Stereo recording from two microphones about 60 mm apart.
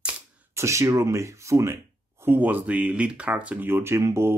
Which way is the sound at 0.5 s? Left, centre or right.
Right.